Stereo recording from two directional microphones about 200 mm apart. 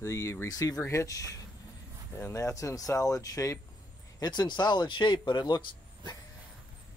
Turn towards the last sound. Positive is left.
turn(degrees=20)  # may be behind; listen again after turning